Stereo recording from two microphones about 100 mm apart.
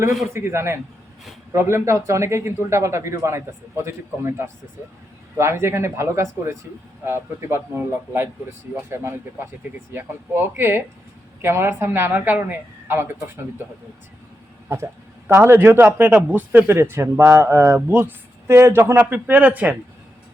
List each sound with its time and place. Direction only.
0.1 s a man's voice: centre (ahead or behind)
0.3 s speech: 25° right (ahead or behind)
15.3 s speech: 25° right (ahead or behind)